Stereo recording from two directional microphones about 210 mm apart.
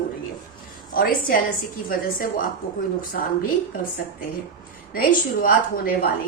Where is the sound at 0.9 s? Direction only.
45° left (ahead or behind).